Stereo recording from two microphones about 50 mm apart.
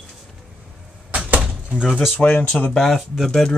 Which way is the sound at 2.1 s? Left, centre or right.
Left.